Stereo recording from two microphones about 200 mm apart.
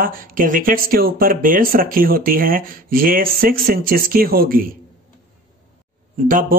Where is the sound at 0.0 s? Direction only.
45° right (ahead or behind).